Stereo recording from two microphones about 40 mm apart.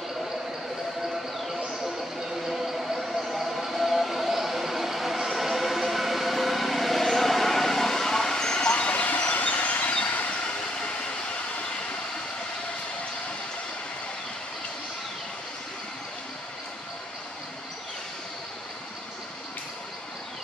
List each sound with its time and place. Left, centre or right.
2.4 s vehicle: centre; by 10.9 s left